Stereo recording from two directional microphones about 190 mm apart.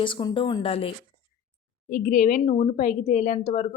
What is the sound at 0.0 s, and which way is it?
Speech, 25° left (ahead or behind).